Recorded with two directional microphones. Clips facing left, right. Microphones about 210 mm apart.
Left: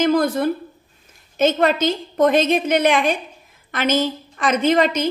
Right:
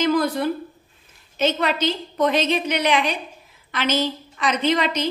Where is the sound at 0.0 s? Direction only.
50° left (ahead or behind).